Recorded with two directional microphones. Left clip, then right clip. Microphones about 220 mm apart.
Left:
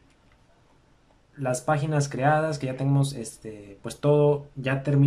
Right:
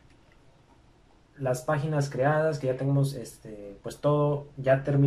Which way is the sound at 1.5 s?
45° left (ahead or behind).